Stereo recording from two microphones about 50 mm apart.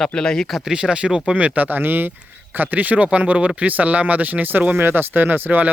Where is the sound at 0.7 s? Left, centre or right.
Centre.